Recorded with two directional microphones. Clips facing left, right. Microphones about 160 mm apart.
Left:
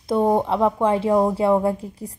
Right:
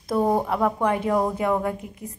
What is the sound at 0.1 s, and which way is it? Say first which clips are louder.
Speech: left 3 dB; 25° left (ahead or behind).